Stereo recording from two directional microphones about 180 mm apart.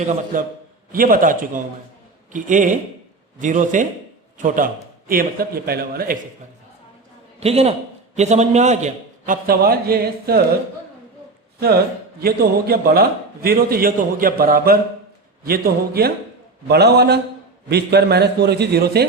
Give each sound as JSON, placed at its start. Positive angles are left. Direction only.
{"t": 0.3, "sound": "a man's voice", "side_deg": -50}
{"t": 7.3, "sound": "a man's voice", "side_deg": -35}
{"t": 12.2, "sound": "a man's voice", "side_deg": -60}